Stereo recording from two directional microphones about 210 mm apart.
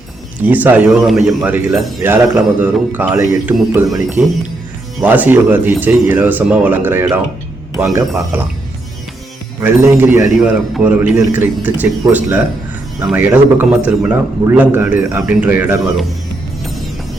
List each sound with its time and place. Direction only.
0.4 s a man's voice: 10° right (ahead or behind)
9.6 s a man's voice: 15° right (ahead or behind)